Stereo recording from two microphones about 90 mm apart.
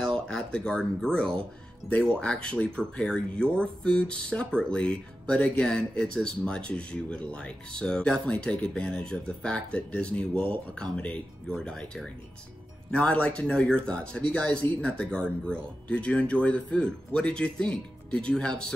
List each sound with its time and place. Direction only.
0.3 s speech: 10° left (ahead or behind)